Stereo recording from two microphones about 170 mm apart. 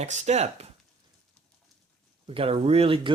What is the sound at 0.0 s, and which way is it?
Speech, 40° right (ahead or behind).